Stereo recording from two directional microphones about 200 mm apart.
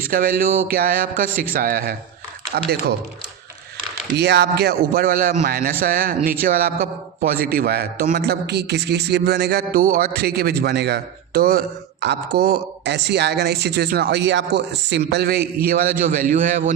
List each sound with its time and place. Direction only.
0.0 s a man's voice: 45° right (ahead or behind)
4.2 s a man's voice: 55° right (ahead or behind)